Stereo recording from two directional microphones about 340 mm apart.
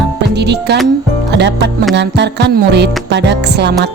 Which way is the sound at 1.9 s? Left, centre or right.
Right.